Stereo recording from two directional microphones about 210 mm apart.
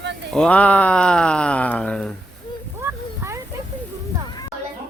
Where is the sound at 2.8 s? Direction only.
15° right (ahead or behind).